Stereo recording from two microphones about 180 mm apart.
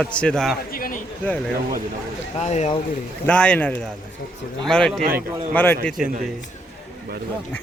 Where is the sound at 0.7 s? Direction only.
55° left (ahead or behind).